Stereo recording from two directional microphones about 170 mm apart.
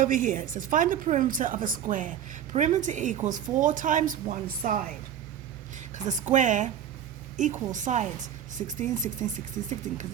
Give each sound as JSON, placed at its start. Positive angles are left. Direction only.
{"t": 0.0, "sound": "a woman's voice", "side_deg": -50}
{"t": 5.7, "sound": "a sound", "side_deg": -45}
{"t": 6.3, "sound": "a woman's voice", "side_deg": -45}